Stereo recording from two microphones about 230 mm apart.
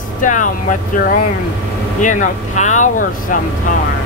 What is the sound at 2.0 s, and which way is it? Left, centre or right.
Speech, left.